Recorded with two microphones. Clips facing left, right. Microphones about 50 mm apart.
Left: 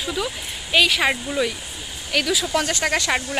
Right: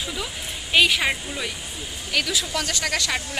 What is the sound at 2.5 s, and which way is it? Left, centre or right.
Speech, left.